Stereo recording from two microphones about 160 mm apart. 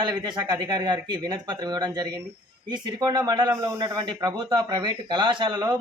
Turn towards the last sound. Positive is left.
turn(degrees=-30)  # may be behind; listen again after turning